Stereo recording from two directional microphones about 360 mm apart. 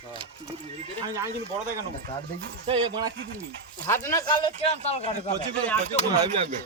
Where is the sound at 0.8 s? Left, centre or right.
Centre.